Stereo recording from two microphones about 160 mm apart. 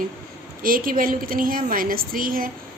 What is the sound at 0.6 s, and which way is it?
A woman's voice, 60° right (ahead or behind).